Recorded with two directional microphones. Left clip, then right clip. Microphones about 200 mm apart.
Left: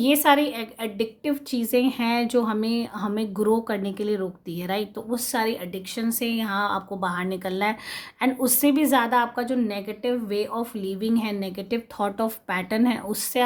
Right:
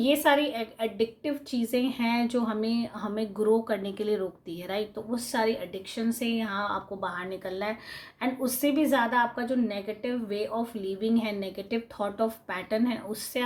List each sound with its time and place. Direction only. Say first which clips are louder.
0.0 s a woman's voice: left 4 dB; 35° left (ahead or behind)